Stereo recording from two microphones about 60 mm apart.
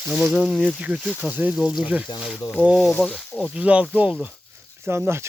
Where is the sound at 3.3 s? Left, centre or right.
Left.